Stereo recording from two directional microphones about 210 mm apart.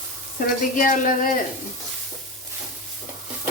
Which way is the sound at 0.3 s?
40° left (ahead or behind).